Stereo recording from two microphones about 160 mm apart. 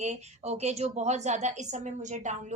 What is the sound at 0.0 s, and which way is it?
A woman's voice, 45° right (ahead or behind).